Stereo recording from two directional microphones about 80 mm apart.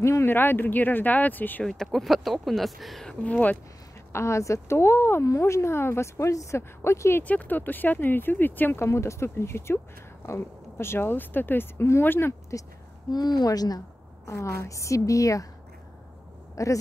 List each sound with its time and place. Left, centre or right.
0.0 s speech: left
1.6 s speech: centre
4.1 s speech: left
7.2 s speech: left
8.8 s speech: left
13.1 s speech: left
14.4 s a woman's voice: left
16.6 s a woman's voice: left